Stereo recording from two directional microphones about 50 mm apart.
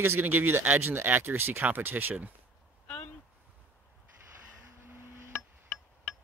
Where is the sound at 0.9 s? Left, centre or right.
Right.